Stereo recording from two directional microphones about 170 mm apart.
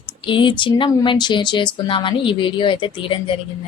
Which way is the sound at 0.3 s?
30° left (ahead or behind).